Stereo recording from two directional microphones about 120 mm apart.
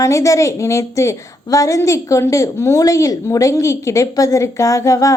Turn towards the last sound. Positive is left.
turn(degrees=25)  # may be behind; listen again after turning